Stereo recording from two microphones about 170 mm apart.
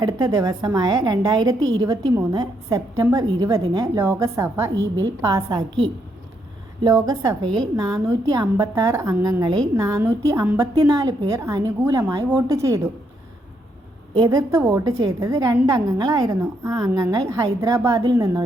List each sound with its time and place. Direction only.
0.0 s a woman's voice: 20° right (ahead or behind)
6.8 s a woman's voice: 20° right (ahead or behind)
14.2 s a woman's voice: 20° right (ahead or behind)